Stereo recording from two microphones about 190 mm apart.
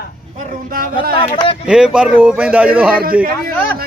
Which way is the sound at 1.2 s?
30° left (ahead or behind).